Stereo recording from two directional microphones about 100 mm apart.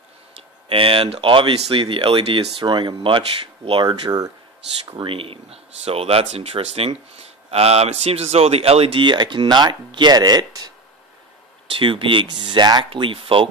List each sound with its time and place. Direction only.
0.4 s speech: 65° right (ahead or behind); by 4.3 s 45° right (ahead or behind)
4.9 s speech: 65° right (ahead or behind)
9.0 s speech: 50° right (ahead or behind)
11.6 s speech: 60° right (ahead or behind)
12.9 s speech: 60° right (ahead or behind)